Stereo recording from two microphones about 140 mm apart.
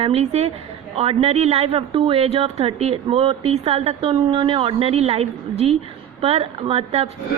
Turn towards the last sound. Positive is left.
turn(degrees=-50)  # may be behind; listen again after turning